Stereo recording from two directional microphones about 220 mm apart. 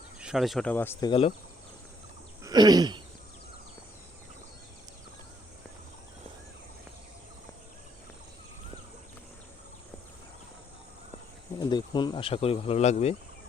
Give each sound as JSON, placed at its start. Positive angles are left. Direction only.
{"t": 0.2, "sound": "speech", "side_deg": 0}
{"t": 2.4, "sound": "a sound", "side_deg": -20}
{"t": 11.6, "sound": "insect", "side_deg": 20}